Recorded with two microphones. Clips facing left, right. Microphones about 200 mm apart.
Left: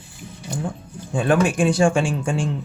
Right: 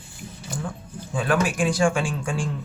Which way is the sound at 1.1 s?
25° left (ahead or behind).